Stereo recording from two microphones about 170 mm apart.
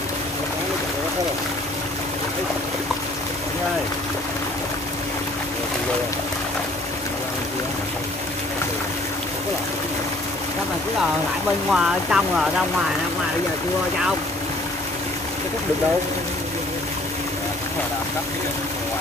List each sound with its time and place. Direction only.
11.7 s speech: 5° right (ahead or behind)